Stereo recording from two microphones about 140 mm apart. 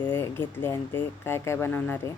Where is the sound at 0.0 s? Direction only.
15° left (ahead or behind).